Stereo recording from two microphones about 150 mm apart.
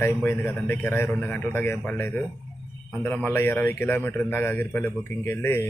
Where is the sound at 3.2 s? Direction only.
15° left (ahead or behind).